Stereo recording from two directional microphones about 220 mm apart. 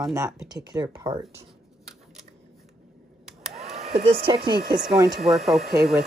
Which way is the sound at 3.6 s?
30° right (ahead or behind).